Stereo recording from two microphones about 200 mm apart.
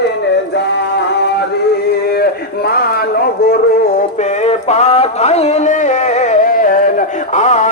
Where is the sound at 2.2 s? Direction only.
50° left (ahead or behind).